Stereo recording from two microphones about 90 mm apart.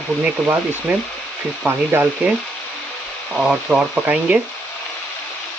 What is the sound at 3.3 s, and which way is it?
Speech, 5° right (ahead or behind).